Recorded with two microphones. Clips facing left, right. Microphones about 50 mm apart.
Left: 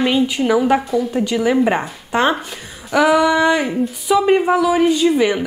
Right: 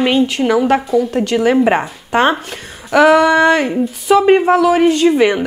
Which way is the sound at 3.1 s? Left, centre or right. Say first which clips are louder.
Right 2 dB; right.